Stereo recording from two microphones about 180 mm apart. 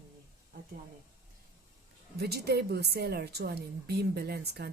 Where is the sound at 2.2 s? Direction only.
65° right (ahead or behind).